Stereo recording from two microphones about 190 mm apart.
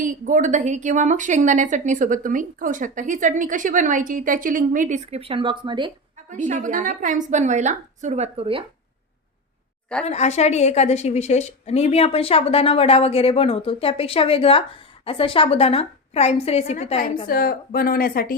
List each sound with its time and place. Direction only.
0.0 s a woman's voice: 40° right (ahead or behind); by 5.9 s 25° right (ahead or behind)
6.3 s a woman's voice: 40° right (ahead or behind)
10.1 s a woman's voice: 35° left (ahead or behind)
17.2 s speech: 50° left (ahead or behind)